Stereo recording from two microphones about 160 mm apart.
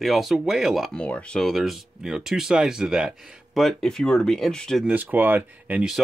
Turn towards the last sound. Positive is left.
turn(degrees=-10)  # may be behind; listen again after turning